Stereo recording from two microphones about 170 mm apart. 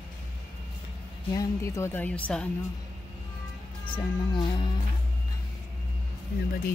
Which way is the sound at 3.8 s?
30° left (ahead or behind).